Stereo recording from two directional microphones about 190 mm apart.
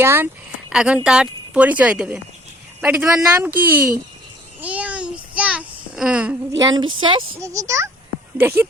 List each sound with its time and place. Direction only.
0.0 s speech: 10° right (ahead or behind)
4.6 s a sound: 5° right (ahead or behind)
6.6 s speech: 20° right (ahead or behind)